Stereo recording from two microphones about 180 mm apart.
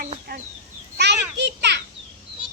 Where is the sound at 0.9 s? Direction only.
70° right (ahead or behind).